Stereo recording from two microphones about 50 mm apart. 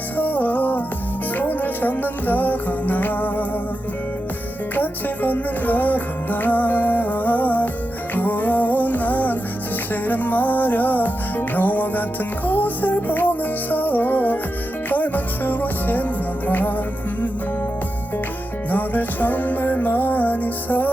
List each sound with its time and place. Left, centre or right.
0.2 s music: left
4.7 s music: left
18.7 s music: left